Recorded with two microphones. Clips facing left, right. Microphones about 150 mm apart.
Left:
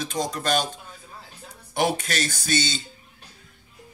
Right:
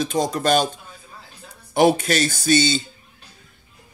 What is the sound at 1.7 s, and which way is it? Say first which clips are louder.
Speech: right 8 dB; 30° right (ahead or behind).